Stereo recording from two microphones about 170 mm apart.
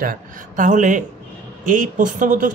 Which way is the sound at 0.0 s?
55° right (ahead or behind).